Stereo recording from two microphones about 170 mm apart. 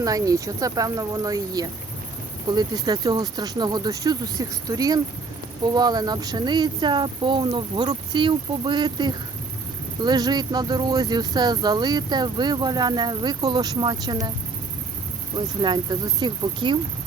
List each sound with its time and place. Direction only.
0.0 s speech: 20° right (ahead or behind)
15.4 s speech: 25° right (ahead or behind)